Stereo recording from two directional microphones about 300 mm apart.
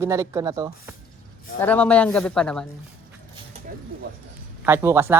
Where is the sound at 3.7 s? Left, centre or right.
Right.